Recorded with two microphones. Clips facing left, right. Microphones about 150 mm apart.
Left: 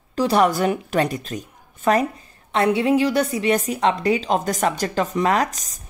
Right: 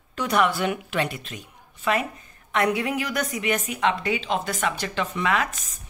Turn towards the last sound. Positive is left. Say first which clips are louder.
# left 4 dB
turn(degrees=40)  # may be behind; listen again after turning